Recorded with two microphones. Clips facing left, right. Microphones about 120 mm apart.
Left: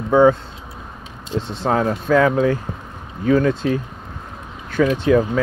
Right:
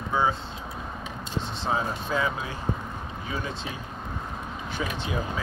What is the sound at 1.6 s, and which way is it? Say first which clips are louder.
Speech: left 9 dB; 65° left (ahead or behind).